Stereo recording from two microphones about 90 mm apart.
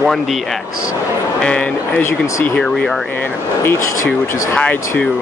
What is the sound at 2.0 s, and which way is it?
Speech, 30° left (ahead or behind).